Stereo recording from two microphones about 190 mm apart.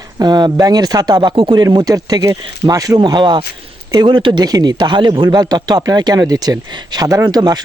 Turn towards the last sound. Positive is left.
turn(degrees=-20)  # may be behind; listen again after turning